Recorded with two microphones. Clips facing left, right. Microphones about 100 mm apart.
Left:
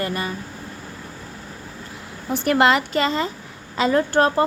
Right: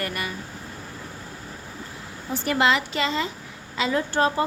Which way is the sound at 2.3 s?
60° left (ahead or behind).